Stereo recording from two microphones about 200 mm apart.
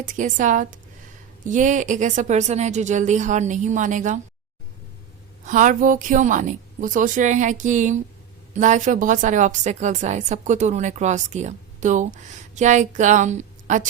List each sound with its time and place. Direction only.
0.0 s a woman's voice: 40° right (ahead or behind)
5.5 s a woman's voice: 40° right (ahead or behind)